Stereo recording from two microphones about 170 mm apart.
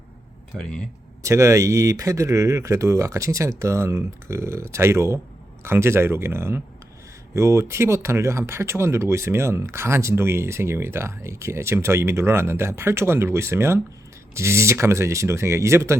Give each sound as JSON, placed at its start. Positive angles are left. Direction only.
{"t": 0.6, "sound": "speech", "side_deg": 5}
{"t": 1.2, "sound": "speech", "side_deg": -15}